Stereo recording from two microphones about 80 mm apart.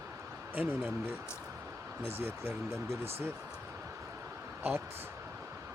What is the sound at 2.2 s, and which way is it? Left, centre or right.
Speech, right.